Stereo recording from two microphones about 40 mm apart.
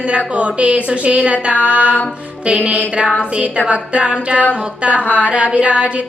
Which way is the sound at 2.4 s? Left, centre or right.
Right.